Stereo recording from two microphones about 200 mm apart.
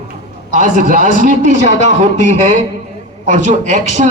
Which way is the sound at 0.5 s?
40° right (ahead or behind).